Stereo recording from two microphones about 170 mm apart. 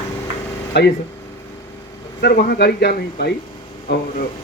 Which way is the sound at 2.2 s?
65° left (ahead or behind).